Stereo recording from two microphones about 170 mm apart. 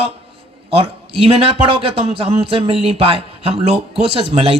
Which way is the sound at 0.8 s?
35° right (ahead or behind).